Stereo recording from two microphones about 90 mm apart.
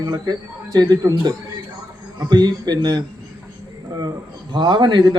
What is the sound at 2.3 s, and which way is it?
Speech, 50° right (ahead or behind).